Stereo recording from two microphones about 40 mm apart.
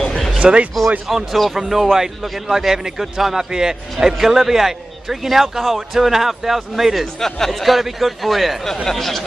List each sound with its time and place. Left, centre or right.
0.1 s a sound: centre
0.4 s speech: right
1.0 s a man's voice: centre
7.2 s speech: centre
7.6 s a man's voice: centre